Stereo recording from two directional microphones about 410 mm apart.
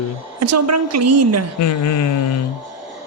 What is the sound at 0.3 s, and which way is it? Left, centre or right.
A woman's voice, right.